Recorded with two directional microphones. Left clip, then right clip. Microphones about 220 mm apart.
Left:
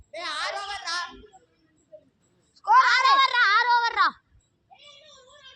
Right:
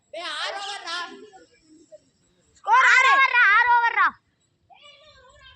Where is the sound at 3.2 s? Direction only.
40° left (ahead or behind).